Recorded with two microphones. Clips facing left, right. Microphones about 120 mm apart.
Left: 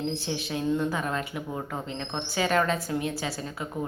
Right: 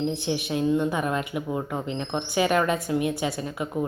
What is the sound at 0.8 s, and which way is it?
A woman's voice, 20° right (ahead or behind).